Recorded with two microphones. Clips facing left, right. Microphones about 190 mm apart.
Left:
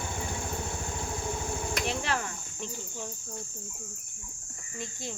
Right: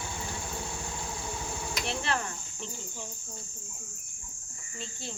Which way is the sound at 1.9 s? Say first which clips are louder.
Right 2 dB; 15° left (ahead or behind).